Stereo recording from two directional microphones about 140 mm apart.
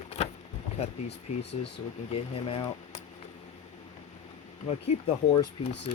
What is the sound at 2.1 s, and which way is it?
Speech, 40° left (ahead or behind).